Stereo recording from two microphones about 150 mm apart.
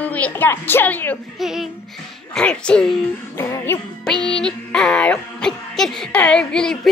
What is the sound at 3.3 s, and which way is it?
Music, 15° left (ahead or behind).